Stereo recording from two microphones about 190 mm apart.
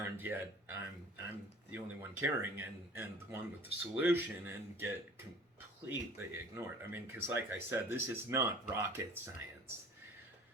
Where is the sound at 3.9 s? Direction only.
10° right (ahead or behind).